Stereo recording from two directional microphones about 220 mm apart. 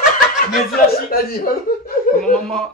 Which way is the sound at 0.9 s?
45° left (ahead or behind).